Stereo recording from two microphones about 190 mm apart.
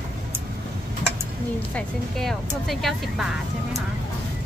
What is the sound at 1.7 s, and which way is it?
Speech, centre (ahead or behind).